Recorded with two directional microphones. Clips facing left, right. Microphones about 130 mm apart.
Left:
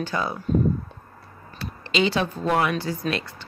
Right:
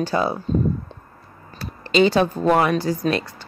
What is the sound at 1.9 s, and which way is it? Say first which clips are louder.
Speech: right 6 dB; 45° right (ahead or behind).